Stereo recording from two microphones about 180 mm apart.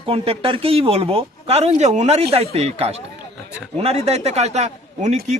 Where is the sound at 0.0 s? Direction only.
30° right (ahead or behind).